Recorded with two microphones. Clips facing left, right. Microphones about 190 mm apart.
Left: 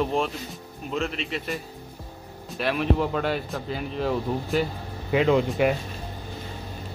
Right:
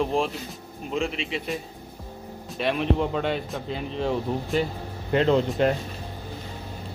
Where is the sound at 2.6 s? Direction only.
Centre (ahead or behind).